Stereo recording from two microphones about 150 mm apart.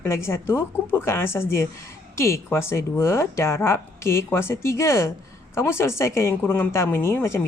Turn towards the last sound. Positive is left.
turn(degrees=15)  # may be behind; listen again after turning